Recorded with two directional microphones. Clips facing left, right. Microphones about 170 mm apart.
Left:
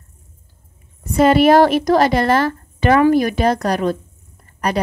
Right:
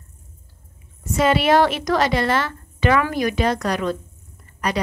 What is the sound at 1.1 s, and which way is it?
A woman's voice, 50° left (ahead or behind).